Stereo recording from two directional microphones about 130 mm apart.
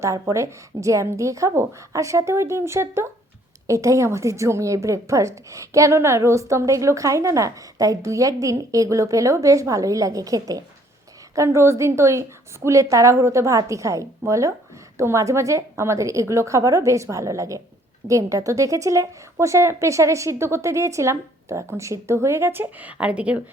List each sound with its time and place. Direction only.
0.0 s a woman's voice: 25° right (ahead or behind)